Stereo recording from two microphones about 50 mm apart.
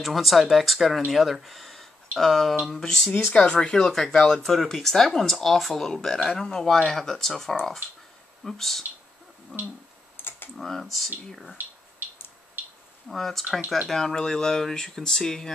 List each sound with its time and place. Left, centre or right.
0.0 s speech: centre
9.5 s speech: centre
10.6 s speech: centre
13.1 s speech: centre
13.9 s speech: centre